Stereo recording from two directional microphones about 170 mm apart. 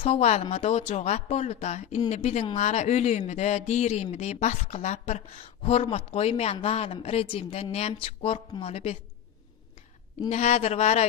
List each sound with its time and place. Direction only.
0.0 s speech: 40° left (ahead or behind)
10.3 s speech: 40° left (ahead or behind)